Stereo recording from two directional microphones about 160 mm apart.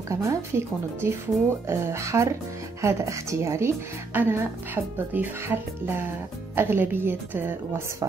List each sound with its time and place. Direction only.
0.1 s speech: 20° right (ahead or behind)